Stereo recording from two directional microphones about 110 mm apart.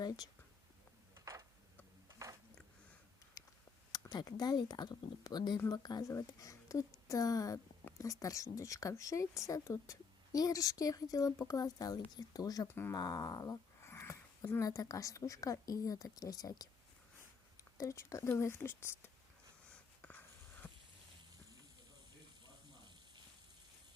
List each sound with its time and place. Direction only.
1.2 s a sound: 30° right (ahead or behind)
3.4 s a sound: 30° left (ahead or behind)
3.9 s speech: 35° left (ahead or behind)
12.6 s speech: 20° left (ahead or behind)
13.0 s speech: 35° left (ahead or behind)
17.7 s speech: 30° left (ahead or behind)
20.0 s wheeze: 15° left (ahead or behind)